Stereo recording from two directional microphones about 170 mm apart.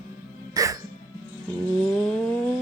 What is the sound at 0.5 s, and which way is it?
Music, 20° right (ahead or behind).